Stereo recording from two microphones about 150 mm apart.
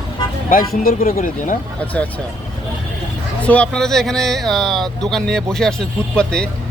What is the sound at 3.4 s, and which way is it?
Speech, 10° left (ahead or behind).